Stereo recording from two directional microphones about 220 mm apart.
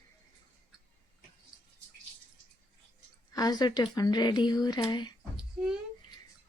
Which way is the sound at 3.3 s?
15° left (ahead or behind).